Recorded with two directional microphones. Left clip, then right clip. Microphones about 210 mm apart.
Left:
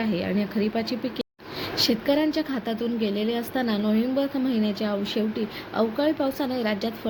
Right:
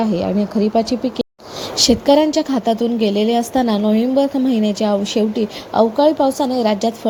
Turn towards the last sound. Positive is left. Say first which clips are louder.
# right 10 dB
turn(degrees=-25)  # may be behind; listen again after turning